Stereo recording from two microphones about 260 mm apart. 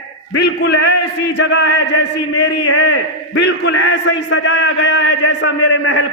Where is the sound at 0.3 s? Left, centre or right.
Left.